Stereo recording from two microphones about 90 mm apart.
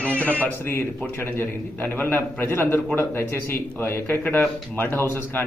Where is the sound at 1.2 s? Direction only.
25° left (ahead or behind).